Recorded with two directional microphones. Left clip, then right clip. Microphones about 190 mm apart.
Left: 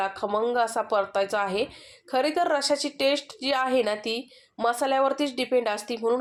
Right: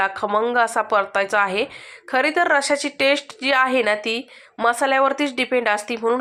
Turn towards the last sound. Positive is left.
turn(degrees=-15)  # may be behind; listen again after turning